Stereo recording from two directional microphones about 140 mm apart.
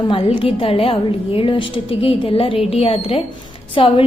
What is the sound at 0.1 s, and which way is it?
A woman's voice, 45° left (ahead or behind).